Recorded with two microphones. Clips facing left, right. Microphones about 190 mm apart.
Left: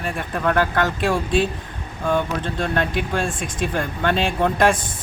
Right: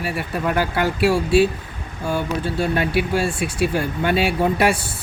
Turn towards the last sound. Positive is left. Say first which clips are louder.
# even
turn(degrees=-30)  # may be behind; listen again after turning